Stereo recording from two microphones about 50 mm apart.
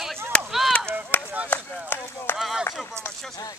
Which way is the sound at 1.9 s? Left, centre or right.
Left.